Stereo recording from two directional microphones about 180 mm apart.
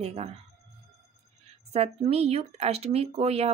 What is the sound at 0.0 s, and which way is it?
Speech, 35° right (ahead or behind).